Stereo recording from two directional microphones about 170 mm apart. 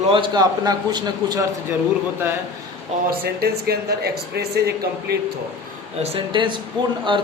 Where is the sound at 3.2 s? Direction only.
65° right (ahead or behind).